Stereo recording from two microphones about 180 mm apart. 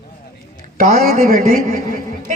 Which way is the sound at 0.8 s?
50° right (ahead or behind).